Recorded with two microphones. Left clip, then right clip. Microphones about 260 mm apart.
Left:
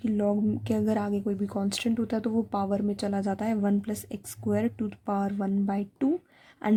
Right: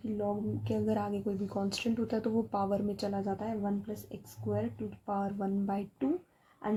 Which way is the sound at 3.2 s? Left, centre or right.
Left.